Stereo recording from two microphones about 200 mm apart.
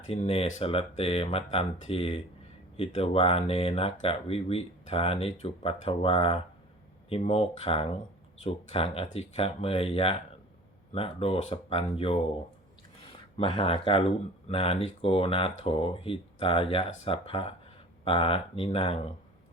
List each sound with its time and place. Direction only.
0.1 s speech: 30° left (ahead or behind)
13.3 s speech: 25° left (ahead or behind)